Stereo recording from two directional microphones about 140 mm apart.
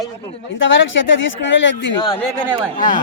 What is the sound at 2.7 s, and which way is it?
Speech, 75° left (ahead or behind).